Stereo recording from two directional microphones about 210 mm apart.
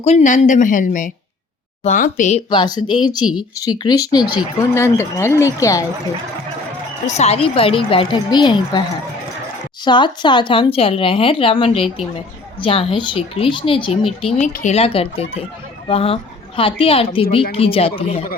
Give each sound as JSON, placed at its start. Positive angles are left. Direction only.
{"t": 0.0, "sound": "speech", "side_deg": 35}
{"t": 2.5, "sound": "speech", "side_deg": 20}
{"t": 7.1, "sound": "speech", "side_deg": 30}
{"t": 9.8, "sound": "speech", "side_deg": 20}